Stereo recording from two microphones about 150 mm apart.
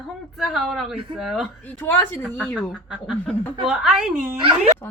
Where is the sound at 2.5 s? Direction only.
5° right (ahead or behind).